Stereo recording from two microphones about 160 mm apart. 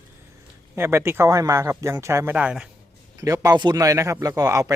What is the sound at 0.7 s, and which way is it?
Speech, 15° right (ahead or behind).